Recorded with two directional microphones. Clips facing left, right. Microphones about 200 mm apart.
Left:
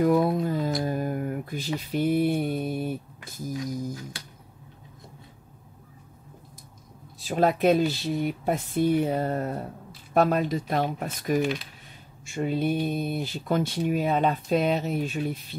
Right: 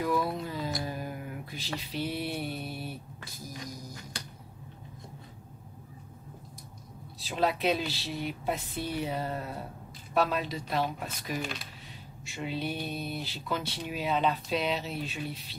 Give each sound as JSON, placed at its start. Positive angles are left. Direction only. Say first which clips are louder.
{"t": 0.0, "sound": "a sound", "louder": "left 8 dB", "side_deg": 50}
{"t": 1.8, "sound": "speech", "louder": "left 11 dB", "side_deg": 50}
{"t": 7.2, "sound": "speech", "louder": "left 6 dB", "side_deg": 50}